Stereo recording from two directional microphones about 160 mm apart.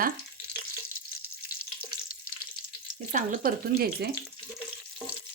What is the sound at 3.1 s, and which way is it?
Speech, 55° right (ahead or behind).